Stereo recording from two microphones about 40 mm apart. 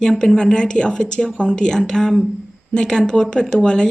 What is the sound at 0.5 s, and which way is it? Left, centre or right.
Speech, left.